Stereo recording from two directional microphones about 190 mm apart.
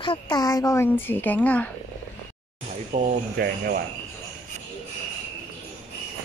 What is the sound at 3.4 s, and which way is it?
Speech, 55° right (ahead or behind).